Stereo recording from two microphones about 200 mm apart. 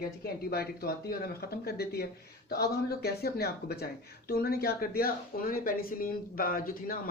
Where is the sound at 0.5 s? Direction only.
50° left (ahead or behind).